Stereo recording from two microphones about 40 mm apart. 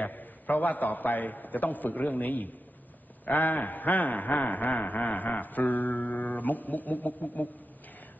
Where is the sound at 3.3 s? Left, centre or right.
Left.